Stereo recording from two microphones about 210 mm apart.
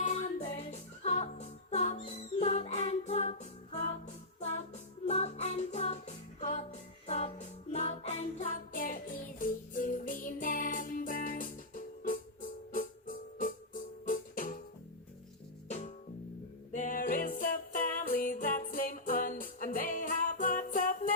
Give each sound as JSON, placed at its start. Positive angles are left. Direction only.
{"t": 0.0, "sound": "music", "side_deg": 35}
{"t": 16.7, "sound": "music", "side_deg": 40}